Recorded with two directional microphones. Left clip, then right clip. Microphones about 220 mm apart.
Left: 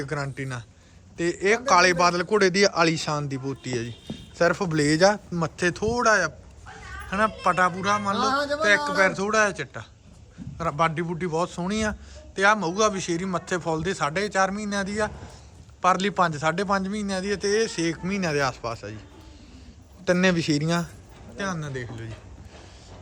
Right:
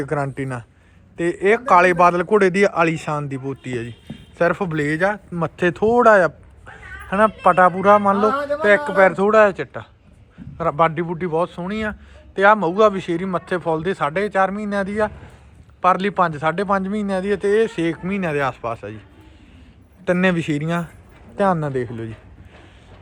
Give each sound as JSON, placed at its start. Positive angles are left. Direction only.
{"t": 0.0, "sound": "a man's voice", "side_deg": 0}
{"t": 2.1, "sound": "speech", "side_deg": 0}
{"t": 2.6, "sound": "a man's voice", "side_deg": 15}
{"t": 5.3, "sound": "a man's voice", "side_deg": 5}
{"t": 8.2, "sound": "speech", "side_deg": -25}
{"t": 8.6, "sound": "a man's voice", "side_deg": 0}
{"t": 12.3, "sound": "a man's voice", "side_deg": 5}
{"t": 20.1, "sound": "a man's voice", "side_deg": 15}
{"t": 21.3, "sound": "speech", "side_deg": -5}